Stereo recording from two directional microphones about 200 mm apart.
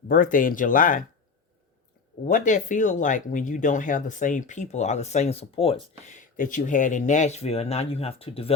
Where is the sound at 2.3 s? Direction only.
40° left (ahead or behind).